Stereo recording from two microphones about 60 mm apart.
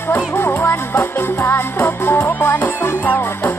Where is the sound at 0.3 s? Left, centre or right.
Left.